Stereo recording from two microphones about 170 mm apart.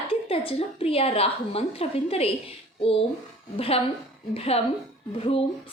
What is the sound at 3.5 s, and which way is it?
A woman's voice, 35° left (ahead or behind).